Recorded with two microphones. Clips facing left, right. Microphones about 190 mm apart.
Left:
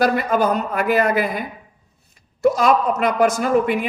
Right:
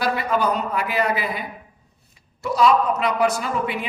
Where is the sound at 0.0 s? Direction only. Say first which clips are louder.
Left 4 dB; 45° left (ahead or behind).